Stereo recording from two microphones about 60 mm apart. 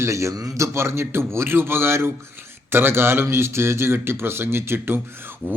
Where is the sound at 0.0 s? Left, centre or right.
Right.